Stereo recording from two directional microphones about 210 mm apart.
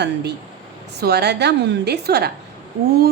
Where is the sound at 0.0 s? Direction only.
55° right (ahead or behind).